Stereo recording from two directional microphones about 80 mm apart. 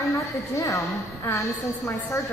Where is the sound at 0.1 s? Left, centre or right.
Left.